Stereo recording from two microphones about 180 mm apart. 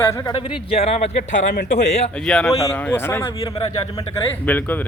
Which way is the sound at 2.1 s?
5° left (ahead or behind).